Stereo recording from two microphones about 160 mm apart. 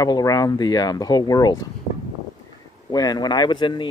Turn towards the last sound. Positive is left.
turn(degrees=30)  # may be behind; listen again after turning